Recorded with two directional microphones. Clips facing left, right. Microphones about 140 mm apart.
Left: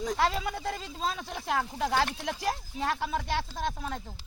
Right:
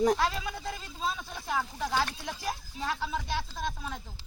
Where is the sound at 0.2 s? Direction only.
65° left (ahead or behind).